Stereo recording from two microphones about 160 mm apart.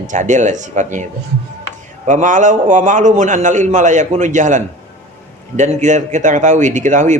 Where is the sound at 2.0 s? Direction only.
50° right (ahead or behind).